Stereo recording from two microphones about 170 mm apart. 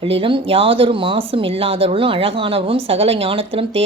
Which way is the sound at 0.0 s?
30° right (ahead or behind).